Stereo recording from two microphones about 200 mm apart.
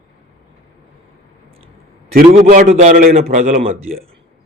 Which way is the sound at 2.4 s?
40° right (ahead or behind).